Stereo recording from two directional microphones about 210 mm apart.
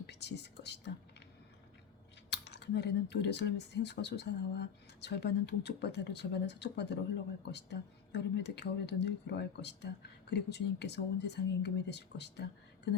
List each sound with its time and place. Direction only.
0.0 s speech: 55° left (ahead or behind)
2.3 s speech: 55° left (ahead or behind)